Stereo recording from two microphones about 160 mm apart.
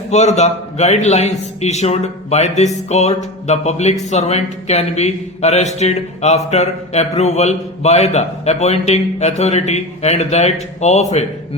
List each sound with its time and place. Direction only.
0.1 s a man's voice: 45° left (ahead or behind)